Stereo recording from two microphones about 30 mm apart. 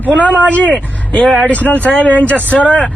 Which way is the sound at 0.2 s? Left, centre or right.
Left.